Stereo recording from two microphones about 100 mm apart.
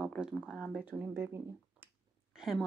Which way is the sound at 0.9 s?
20° right (ahead or behind).